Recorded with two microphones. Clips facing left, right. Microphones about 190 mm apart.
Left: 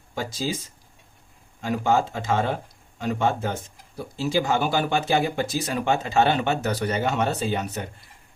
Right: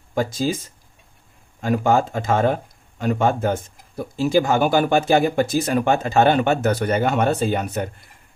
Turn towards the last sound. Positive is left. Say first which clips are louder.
# right 5 dB
turn(degrees=-55)  # may be behind; listen again after turning